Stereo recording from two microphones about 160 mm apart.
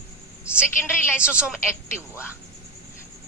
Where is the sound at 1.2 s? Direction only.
5° right (ahead or behind).